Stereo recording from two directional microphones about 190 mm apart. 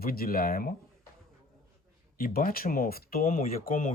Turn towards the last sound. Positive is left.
turn(degrees=45)  # may be behind; listen again after turning